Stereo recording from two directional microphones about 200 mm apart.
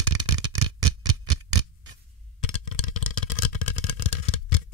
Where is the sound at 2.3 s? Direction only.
30° left (ahead or behind).